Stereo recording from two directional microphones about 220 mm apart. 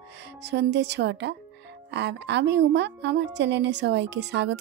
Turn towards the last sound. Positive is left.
turn(degrees=-50)  # may be behind; listen again after turning